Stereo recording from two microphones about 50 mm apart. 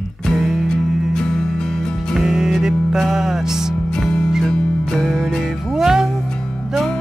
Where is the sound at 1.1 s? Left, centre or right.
Centre.